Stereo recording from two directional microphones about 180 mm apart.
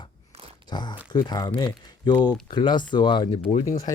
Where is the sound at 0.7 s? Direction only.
25° left (ahead or behind).